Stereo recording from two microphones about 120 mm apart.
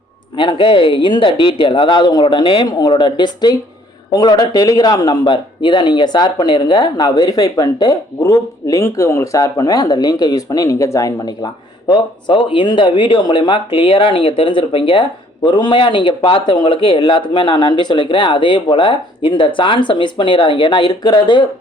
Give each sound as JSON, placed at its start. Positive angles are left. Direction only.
{"t": 0.3, "sound": "speech", "side_deg": 45}